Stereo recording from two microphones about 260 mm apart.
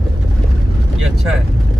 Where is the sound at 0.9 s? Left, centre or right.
Centre.